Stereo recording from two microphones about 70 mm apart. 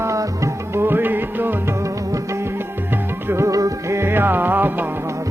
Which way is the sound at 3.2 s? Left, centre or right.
Right.